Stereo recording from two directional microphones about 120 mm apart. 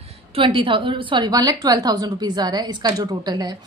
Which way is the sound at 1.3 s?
30° right (ahead or behind).